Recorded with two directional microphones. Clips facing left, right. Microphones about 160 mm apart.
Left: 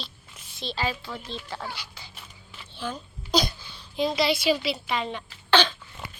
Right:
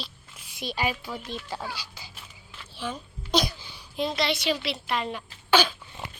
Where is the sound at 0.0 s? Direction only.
5° right (ahead or behind).